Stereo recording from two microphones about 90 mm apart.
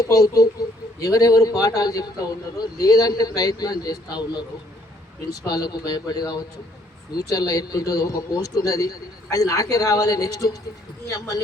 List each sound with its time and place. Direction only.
0.0 s a man's voice: 40° left (ahead or behind)